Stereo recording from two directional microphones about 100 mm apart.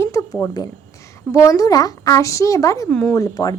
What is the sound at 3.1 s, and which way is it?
Speech, 40° left (ahead or behind).